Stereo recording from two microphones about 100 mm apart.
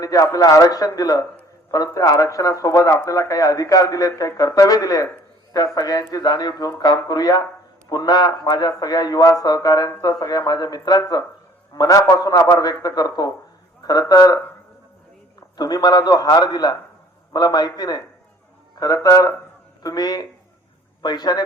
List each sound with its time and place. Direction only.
0.0 s a man's voice: 35° left (ahead or behind)
15.5 s a man's voice: 40° left (ahead or behind)
19.0 s a man's voice: 40° left (ahead or behind)